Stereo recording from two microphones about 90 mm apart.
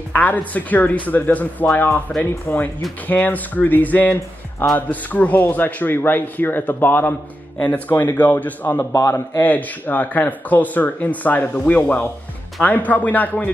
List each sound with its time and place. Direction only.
0.1 s speech: 20° left (ahead or behind)
8.9 s a man's voice: 40° left (ahead or behind)
9.4 s speech: 20° left (ahead or behind)